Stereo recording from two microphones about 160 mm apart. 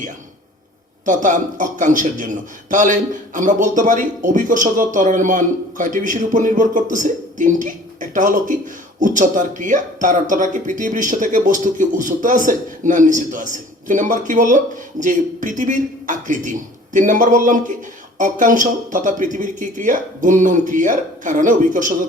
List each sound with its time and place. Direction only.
1.0 s a man's voice: 55° right (ahead or behind)